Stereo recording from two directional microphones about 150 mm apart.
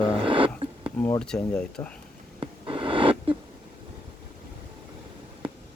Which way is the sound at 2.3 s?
35° right (ahead or behind).